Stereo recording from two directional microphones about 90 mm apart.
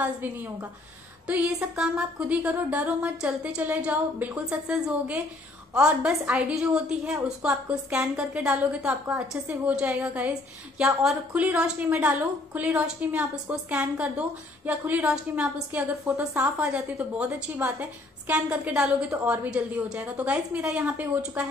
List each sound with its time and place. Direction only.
0.0 s a woman's voice: 25° right (ahead or behind)
10.8 s a woman's voice: 5° right (ahead or behind)